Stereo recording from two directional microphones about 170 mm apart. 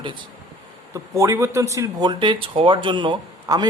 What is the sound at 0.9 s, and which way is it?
Speech, 20° right (ahead or behind).